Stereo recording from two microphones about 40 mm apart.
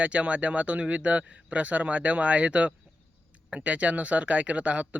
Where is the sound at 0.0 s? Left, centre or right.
Right.